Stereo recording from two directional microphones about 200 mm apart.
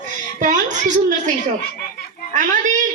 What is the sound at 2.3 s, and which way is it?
Speech, 40° right (ahead or behind).